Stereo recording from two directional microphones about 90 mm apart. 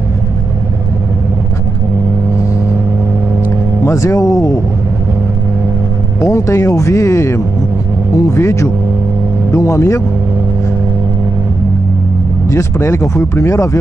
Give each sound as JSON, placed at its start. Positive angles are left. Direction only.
{"t": 3.8, "sound": "speech", "side_deg": 35}
{"t": 6.2, "sound": "speech", "side_deg": 35}
{"t": 12.4, "sound": "speech", "side_deg": 30}